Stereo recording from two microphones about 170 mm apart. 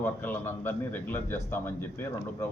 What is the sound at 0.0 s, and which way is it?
A man's voice, 10° left (ahead or behind).